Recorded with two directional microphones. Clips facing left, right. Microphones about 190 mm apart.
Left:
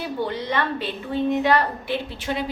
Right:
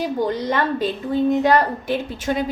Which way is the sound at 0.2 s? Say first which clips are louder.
Right 2 dB; 45° right (ahead or behind).